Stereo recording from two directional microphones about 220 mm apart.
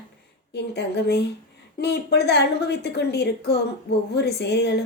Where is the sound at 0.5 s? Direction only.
50° left (ahead or behind).